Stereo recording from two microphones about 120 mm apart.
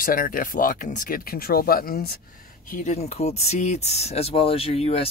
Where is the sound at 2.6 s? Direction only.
85° left.